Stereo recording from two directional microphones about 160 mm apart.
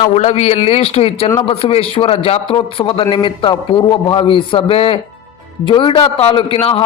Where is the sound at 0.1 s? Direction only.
45° left (ahead or behind).